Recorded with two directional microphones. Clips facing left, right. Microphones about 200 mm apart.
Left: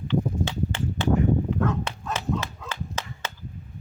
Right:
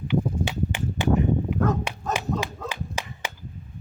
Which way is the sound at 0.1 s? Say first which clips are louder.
Even; 15° right (ahead or behind).